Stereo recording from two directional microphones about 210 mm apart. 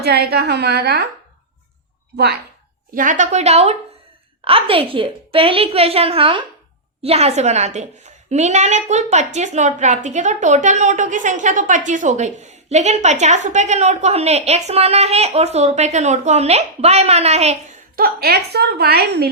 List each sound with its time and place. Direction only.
0.0 s a woman's voice: 50° right (ahead or behind)
2.9 s a woman's voice: 40° right (ahead or behind)
17.9 s a woman's voice: 45° right (ahead or behind)